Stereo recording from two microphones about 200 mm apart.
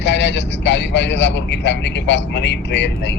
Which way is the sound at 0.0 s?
60° left (ahead or behind).